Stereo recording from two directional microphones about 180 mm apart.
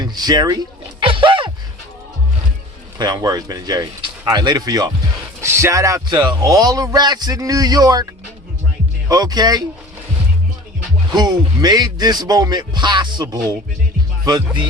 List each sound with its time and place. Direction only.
0.0 s a man's voice: 20° right (ahead or behind)
0.9 s music: 30° right (ahead or behind)
3.0 s a man's voice: 20° right (ahead or behind)
9.0 s a man's voice: 20° right (ahead or behind)
11.1 s a man's voice: 20° right (ahead or behind)